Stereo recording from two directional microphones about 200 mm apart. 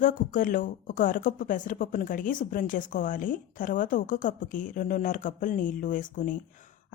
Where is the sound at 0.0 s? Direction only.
40° left (ahead or behind).